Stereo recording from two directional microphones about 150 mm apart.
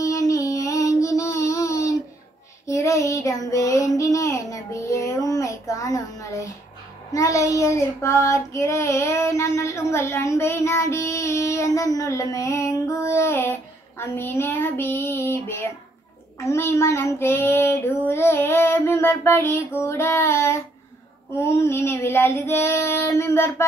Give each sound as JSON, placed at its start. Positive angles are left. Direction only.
{"t": 0.0, "sound": "child singing", "side_deg": 20}
{"t": 1.4, "sound": "a sound", "side_deg": 20}
{"t": 2.6, "sound": "child singing", "side_deg": 20}